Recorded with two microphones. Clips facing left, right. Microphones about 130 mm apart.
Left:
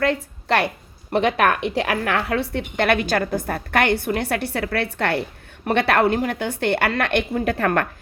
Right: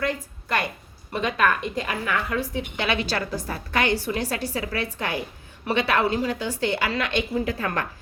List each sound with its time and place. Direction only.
0.0 s a woman's voice: 70° left (ahead or behind)